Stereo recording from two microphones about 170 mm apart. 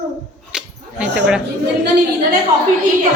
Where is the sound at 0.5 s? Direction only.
5° right (ahead or behind).